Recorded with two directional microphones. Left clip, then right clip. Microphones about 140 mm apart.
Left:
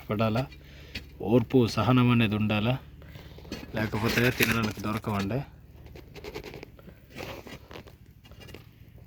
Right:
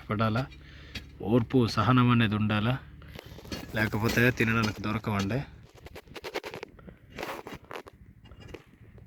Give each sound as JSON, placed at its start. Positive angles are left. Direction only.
{"t": 0.1, "sound": "speech", "side_deg": 5}
{"t": 3.8, "sound": "speech", "side_deg": -15}
{"t": 4.8, "sound": "speech", "side_deg": -10}
{"t": 6.6, "sound": "biting", "side_deg": -50}